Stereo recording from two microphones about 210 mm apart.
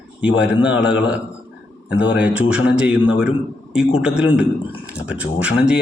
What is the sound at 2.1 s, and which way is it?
A man's voice, 5° right (ahead or behind).